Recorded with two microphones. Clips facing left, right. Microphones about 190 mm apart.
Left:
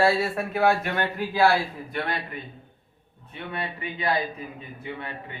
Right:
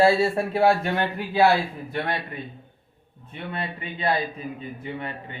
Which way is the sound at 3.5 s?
30° right (ahead or behind).